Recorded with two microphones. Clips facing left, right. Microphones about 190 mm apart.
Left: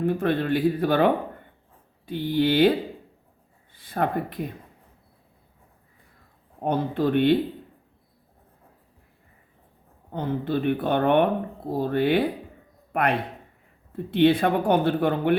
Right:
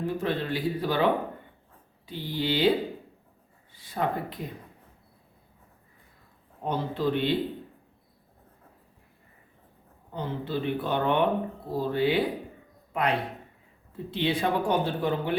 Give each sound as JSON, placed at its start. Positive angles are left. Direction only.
{"t": 0.0, "sound": "speech", "side_deg": 55}
{"t": 3.8, "sound": "speech", "side_deg": 55}
{"t": 6.6, "sound": "speech", "side_deg": 55}
{"t": 10.1, "sound": "a man's voice", "side_deg": 55}